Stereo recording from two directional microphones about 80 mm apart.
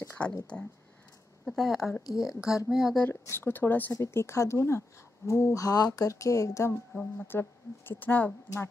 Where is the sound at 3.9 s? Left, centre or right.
Left.